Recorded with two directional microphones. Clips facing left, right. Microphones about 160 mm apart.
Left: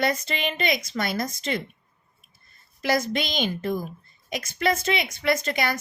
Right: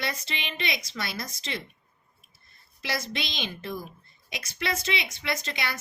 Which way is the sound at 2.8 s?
50° left (ahead or behind).